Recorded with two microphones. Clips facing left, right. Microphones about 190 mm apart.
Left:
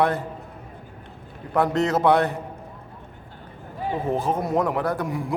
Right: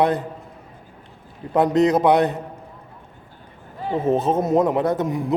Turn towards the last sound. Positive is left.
turn(degrees=-20)  # may be behind; listen again after turning